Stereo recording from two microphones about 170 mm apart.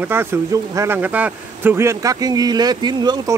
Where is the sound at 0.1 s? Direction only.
15° right (ahead or behind).